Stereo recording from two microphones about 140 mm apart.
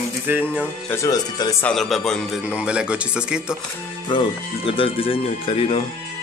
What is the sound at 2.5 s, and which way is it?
Speech, 5° right (ahead or behind).